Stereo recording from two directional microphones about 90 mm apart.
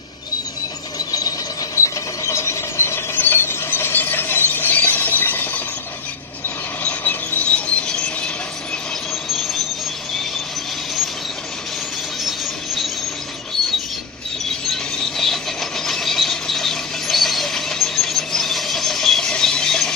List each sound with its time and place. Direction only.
0.9 s mechanisms: 45° left (ahead or behind)
1.8 s ratchet: 35° left (ahead or behind)
6.8 s rub: 20° left (ahead or behind)
14.7 s mechanisms: 5° left (ahead or behind)